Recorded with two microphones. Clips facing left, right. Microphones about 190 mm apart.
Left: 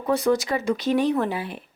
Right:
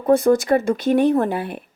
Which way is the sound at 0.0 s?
50° right (ahead or behind).